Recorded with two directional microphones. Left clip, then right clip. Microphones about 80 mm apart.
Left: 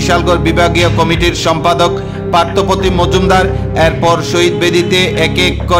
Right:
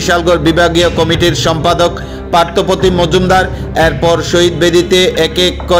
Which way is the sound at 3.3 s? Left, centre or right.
Right.